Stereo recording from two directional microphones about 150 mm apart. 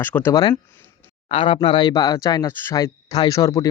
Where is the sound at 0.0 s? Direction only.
15° left (ahead or behind).